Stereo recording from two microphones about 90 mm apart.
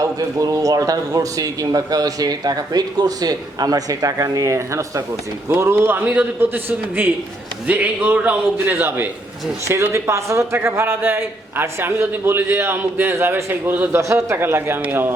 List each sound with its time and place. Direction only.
0.0 s a man's voice: 40° right (ahead or behind); by 14.0 s 25° right (ahead or behind)
14.0 s a man's voice: 35° right (ahead or behind)
14.3 s a man's voice: 25° right (ahead or behind)